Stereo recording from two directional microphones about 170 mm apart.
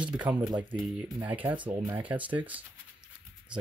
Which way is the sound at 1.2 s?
10° right (ahead or behind).